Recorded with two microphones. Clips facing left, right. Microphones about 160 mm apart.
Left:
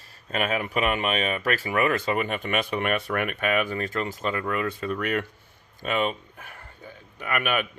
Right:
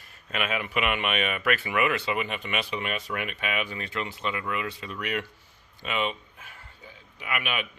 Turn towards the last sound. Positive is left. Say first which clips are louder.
# left 5 dB
turn(degrees=45)  # may be behind; listen again after turning